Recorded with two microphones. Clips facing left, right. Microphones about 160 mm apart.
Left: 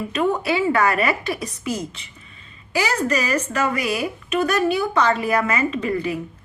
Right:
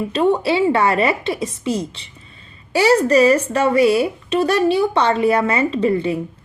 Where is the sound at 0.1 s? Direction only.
30° right (ahead or behind).